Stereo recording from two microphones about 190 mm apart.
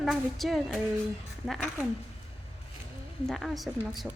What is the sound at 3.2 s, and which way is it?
Speech, centre (ahead or behind).